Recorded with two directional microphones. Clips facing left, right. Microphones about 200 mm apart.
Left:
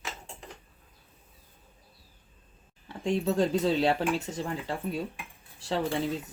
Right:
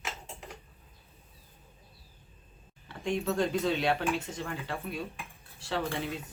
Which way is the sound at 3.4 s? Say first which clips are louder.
Left 4 dB; 35° left (ahead or behind).